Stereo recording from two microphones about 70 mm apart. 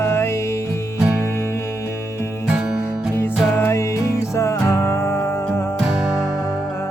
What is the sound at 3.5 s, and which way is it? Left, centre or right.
Music, left.